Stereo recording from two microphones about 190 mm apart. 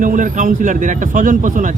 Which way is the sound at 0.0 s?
45° right (ahead or behind).